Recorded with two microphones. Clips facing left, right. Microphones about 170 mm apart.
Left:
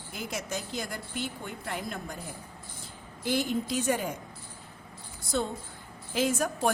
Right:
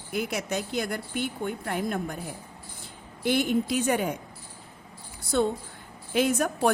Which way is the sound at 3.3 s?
65° right (ahead or behind).